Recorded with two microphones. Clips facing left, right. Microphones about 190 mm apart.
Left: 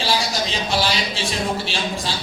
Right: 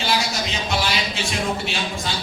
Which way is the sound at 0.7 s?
30° left (ahead or behind).